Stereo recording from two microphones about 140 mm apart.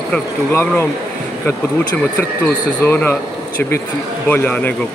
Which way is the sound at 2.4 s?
10° left (ahead or behind).